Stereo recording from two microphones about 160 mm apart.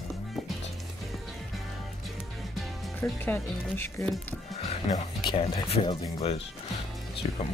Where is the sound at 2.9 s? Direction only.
10° left (ahead or behind).